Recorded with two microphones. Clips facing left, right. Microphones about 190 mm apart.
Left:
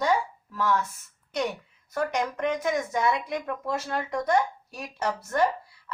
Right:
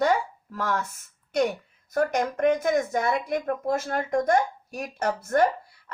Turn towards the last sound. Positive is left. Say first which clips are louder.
# right 2 dB
turn(degrees=-50)  # may be behind; listen again after turning